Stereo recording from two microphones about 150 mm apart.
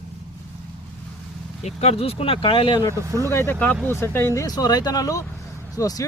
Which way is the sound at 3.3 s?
15° left (ahead or behind).